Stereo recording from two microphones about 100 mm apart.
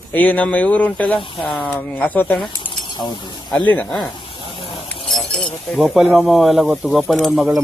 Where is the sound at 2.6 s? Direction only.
55° left (ahead or behind).